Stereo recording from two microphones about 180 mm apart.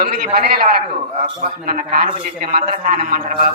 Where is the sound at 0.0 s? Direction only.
50° right (ahead or behind).